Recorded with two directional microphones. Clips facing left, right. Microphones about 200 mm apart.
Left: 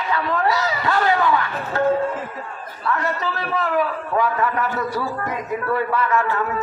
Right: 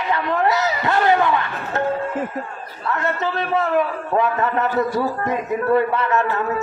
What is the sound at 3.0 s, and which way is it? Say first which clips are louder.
A man's voice: right 2 dB; 25° right (ahead or behind).